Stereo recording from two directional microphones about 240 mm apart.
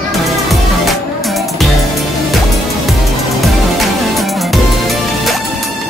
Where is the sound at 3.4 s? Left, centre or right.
Centre.